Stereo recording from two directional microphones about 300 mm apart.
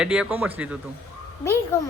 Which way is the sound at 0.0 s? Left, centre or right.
Centre.